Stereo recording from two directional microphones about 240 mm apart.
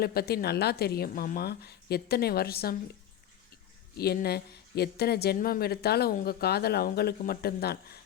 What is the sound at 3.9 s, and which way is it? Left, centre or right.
A woman's voice, left.